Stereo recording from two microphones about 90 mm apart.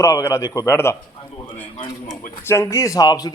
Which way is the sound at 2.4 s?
30° left (ahead or behind).